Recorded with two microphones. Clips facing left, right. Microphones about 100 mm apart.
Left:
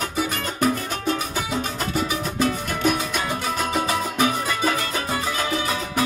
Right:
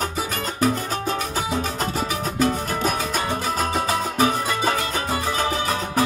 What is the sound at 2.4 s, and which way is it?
Music, 40° right (ahead or behind).